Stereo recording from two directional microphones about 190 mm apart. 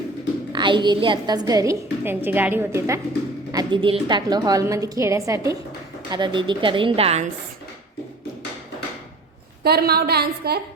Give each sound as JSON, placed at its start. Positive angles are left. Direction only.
{"t": 0.5, "sound": "a woman's voice", "side_deg": -25}
{"t": 9.6, "sound": "a woman's voice", "side_deg": -55}